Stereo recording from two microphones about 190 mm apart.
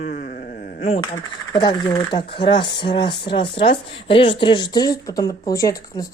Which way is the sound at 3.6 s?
25° left (ahead or behind).